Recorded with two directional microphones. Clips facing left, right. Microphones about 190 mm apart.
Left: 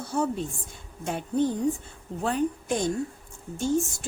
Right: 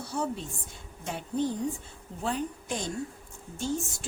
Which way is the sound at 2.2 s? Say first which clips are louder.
Left 6 dB; 55° left (ahead or behind).